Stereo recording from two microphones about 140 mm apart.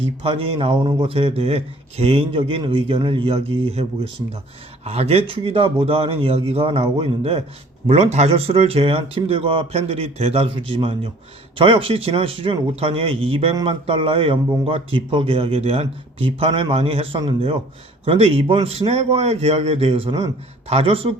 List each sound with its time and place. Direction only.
0.2 s speech: 40° right (ahead or behind)